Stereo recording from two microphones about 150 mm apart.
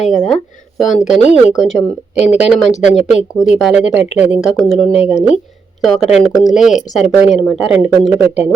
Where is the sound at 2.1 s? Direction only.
50° left (ahead or behind).